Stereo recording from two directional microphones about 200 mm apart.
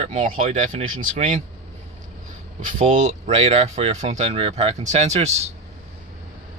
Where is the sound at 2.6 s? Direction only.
40° right (ahead or behind).